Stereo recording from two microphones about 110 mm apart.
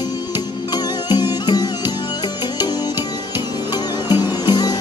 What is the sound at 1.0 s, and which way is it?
Music, 40° left (ahead or behind).